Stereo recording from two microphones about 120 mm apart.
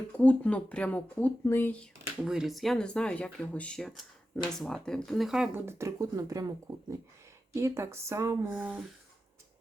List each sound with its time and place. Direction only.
0.1 s speech: 10° left (ahead or behind)
2.2 s speech: 5° right (ahead or behind)
5.5 s speech: 20° right (ahead or behind)
7.5 s speech: 25° right (ahead or behind)
8.4 s speech: 10° right (ahead or behind)